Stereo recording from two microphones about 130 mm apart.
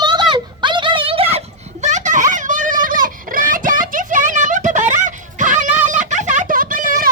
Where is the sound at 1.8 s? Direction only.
70° right (ahead or behind); by 7.1 s 90° right.